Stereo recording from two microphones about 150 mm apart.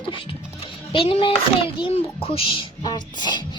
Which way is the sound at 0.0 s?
35° left (ahead or behind).